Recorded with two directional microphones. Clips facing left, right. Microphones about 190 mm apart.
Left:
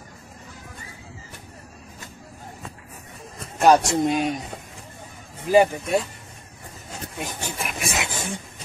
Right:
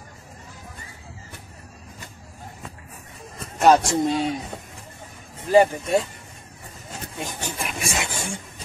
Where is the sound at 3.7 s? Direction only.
20° left (ahead or behind).